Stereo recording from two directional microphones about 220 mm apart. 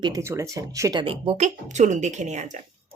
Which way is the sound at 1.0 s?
25° right (ahead or behind).